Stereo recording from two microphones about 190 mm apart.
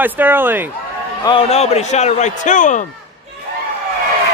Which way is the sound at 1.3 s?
30° left (ahead or behind).